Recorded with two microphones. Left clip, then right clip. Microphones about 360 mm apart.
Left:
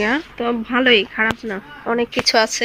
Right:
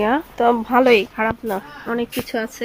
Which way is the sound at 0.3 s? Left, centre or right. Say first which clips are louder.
Right 4 dB; centre.